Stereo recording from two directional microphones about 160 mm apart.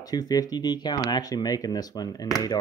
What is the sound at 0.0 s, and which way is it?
Speech, 25° left (ahead or behind).